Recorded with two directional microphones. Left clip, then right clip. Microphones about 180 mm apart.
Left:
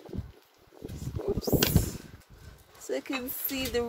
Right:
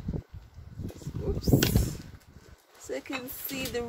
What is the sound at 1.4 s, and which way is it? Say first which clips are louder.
Speech: right 2 dB; 35° left (ahead or behind).